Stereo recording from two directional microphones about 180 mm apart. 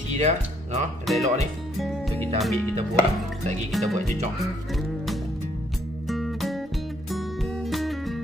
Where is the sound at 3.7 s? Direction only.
Centre (ahead or behind).